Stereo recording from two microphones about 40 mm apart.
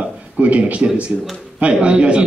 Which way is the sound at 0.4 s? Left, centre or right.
Right.